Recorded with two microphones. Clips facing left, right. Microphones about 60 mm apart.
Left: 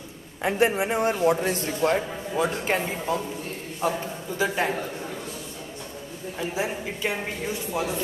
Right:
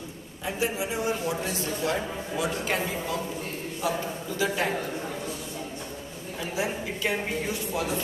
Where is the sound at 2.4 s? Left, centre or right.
Left.